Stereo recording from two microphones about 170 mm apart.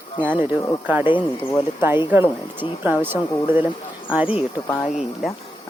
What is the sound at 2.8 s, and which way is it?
Speech, 10° right (ahead or behind).